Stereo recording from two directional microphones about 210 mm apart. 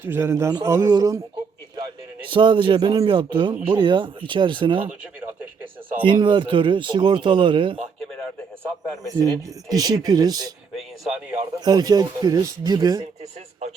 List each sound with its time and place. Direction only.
0.0 s speech: 10° right (ahead or behind)
2.3 s speech: 25° right (ahead or behind)
4.8 s speech: 10° right (ahead or behind)
6.0 s speech: 25° right (ahead or behind)
9.0 s speech: 15° right (ahead or behind)
11.0 s speech: 5° right (ahead or behind)
11.6 s speech: 20° right (ahead or behind)